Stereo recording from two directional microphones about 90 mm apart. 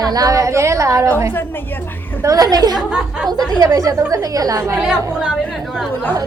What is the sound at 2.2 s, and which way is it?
A woman's voice, 40° right (ahead or behind).